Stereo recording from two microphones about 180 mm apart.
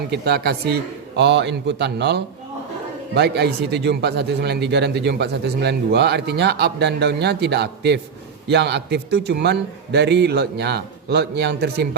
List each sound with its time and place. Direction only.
0.1 s a man's voice: 65° right (ahead or behind)